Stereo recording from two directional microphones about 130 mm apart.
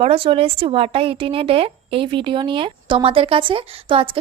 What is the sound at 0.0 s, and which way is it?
A woman's voice, 45° right (ahead or behind).